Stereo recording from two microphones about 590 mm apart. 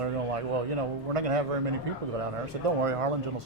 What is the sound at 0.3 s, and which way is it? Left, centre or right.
A man's voice, right.